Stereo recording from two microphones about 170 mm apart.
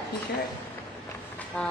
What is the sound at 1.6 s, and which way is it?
Speech, 10° left (ahead or behind).